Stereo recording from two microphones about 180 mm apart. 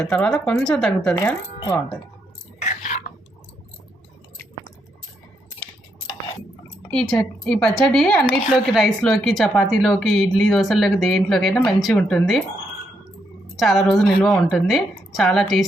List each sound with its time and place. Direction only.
0.0 s speech: 5° left (ahead or behind)
1.5 s speech: 25° left (ahead or behind)
2.6 s chewing: 40° left (ahead or behind)
6.9 s speech: 5° left (ahead or behind)
13.6 s speech: centre (ahead or behind)